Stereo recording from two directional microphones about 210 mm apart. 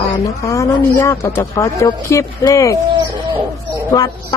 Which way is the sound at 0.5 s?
15° left (ahead or behind).